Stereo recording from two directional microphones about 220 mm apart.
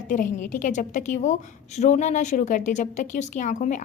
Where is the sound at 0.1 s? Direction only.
35° left (ahead or behind).